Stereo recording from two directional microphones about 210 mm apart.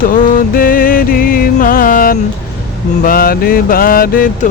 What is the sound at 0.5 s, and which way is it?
Music, 45° left (ahead or behind).